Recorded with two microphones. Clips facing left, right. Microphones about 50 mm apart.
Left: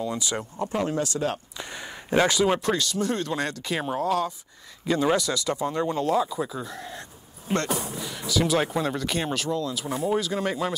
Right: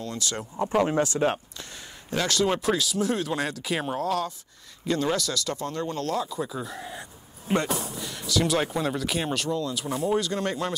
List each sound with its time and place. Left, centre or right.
0.0 s speech: centre
0.7 s speech: right
1.6 s a sound: left
2.3 s speech: centre
7.7 s speech: centre